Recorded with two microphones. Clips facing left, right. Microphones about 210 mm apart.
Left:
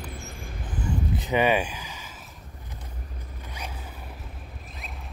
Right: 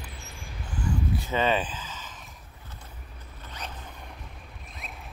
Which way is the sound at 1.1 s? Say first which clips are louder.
Left 5 dB; 15° left (ahead or behind).